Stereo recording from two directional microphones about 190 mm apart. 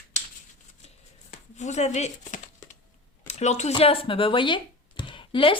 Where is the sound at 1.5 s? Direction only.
35° left (ahead or behind).